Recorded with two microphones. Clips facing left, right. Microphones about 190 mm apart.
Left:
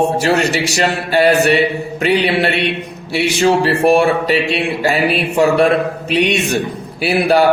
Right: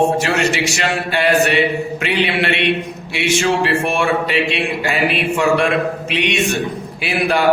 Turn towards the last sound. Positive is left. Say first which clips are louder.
# left 5 dB
turn(degrees=40)  # may be behind; listen again after turning